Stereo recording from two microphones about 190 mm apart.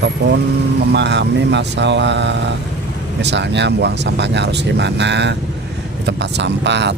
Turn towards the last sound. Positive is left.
turn(degrees=-65)  # may be behind; listen again after turning